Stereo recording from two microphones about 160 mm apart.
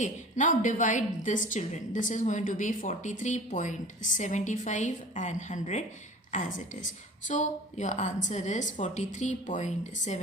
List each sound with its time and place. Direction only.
0.0 s a woman's voice: 50° left (ahead or behind)